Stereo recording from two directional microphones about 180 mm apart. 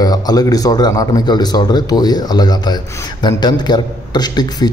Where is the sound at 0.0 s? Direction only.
20° left (ahead or behind).